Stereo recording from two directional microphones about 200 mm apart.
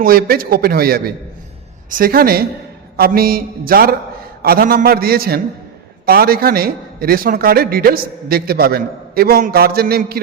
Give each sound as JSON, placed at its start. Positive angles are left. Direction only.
{"t": 0.0, "sound": "a man's voice", "side_deg": -50}